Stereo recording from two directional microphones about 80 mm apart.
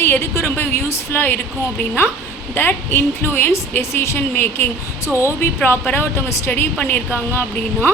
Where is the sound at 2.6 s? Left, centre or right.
Left.